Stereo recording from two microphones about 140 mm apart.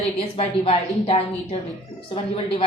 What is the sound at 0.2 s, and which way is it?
A woman's voice, 40° left (ahead or behind).